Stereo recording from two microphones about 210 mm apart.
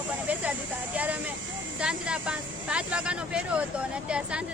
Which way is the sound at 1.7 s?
5° right (ahead or behind).